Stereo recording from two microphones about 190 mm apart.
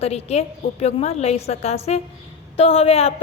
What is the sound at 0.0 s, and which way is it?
A woman's voice, 35° left (ahead or behind).